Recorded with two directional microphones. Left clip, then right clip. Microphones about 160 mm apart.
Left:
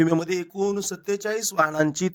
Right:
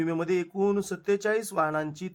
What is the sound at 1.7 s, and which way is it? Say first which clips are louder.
Speech: left 8 dB; 45° left (ahead or behind).